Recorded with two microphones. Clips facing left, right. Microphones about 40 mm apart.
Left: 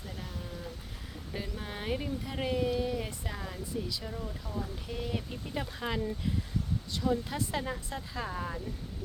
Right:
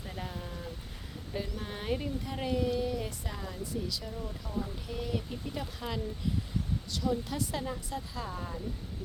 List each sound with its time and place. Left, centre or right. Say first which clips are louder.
1.3 s speech: right 1 dB; centre; by 6.0 s left
7.0 s speech: left 1 dB; left